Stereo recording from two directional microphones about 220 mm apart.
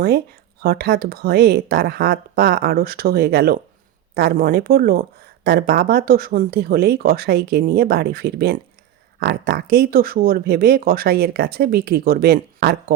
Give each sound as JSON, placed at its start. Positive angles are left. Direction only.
{"t": 0.6, "sound": "speech", "side_deg": -45}